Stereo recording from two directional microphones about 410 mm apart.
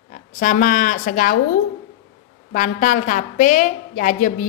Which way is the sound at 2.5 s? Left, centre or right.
Centre.